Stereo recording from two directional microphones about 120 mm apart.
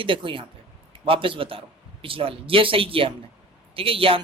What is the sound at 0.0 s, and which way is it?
Speech, 45° right (ahead or behind).